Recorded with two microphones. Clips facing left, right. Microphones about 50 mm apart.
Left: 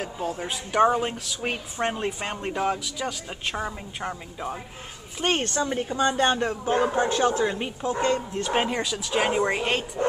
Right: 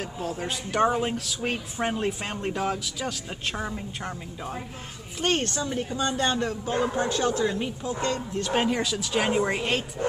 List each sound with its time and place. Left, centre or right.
0.0 s speech: centre
5.2 s a woman's voice: left
8.7 s speech: centre